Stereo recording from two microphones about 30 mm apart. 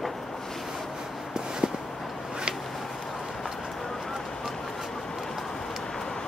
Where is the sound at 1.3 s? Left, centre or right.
Right.